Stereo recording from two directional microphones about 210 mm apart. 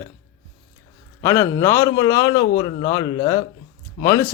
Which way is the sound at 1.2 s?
15° left (ahead or behind).